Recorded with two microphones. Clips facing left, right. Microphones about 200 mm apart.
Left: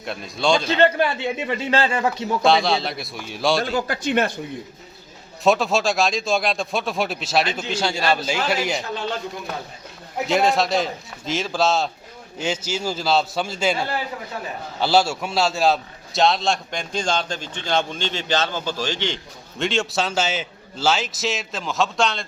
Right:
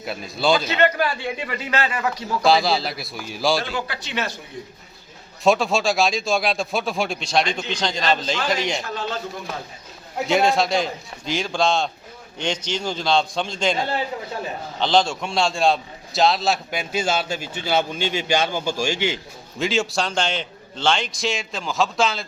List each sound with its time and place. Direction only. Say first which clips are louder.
0.0 s a man's voice: even; 5° right (ahead or behind)
0.6 s a man's voice: left 2 dB; 30° left (ahead or behind)
2.4 s a man's voice: even; centre (ahead or behind)
3.7 s a man's voice: left 6 dB; 45° left (ahead or behind)
5.4 s a man's voice: even; centre (ahead or behind)
10.2 s a man's voice: even; centre (ahead or behind)